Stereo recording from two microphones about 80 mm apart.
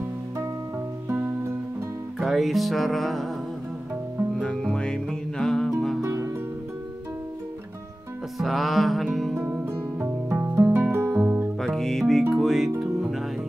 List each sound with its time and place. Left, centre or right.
1.0 s music: right
2.1 s music: centre
4.4 s music: centre
5.9 s music: right
8.4 s music: centre
9.3 s music: right
11.6 s music: centre